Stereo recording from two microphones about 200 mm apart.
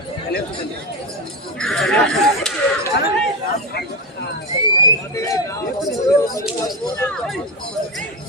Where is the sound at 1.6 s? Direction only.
5° left (ahead or behind).